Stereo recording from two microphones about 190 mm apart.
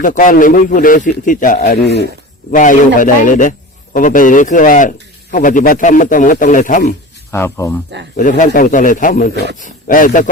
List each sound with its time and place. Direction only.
0.0 s speech: 45° left (ahead or behind); by 2.0 s 65° left (ahead or behind)
2.5 s speech: 45° left (ahead or behind)
7.3 s speech: 10° left (ahead or behind)
8.1 s speech: 45° left (ahead or behind)